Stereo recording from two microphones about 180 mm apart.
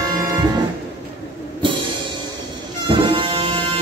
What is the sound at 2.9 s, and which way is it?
Bagpipes, 25° right (ahead or behind).